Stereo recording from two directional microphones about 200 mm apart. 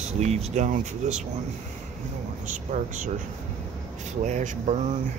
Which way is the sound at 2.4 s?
40° right (ahead or behind).